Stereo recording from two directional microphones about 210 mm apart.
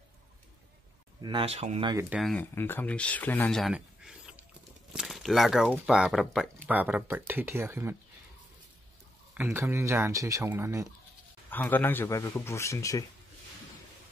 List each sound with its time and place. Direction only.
1.2 s speech: 25° right (ahead or behind)
2.0 s speech: 5° right (ahead or behind)
9.3 s speech: 10° right (ahead or behind)
11.5 s speech: 10° left (ahead or behind)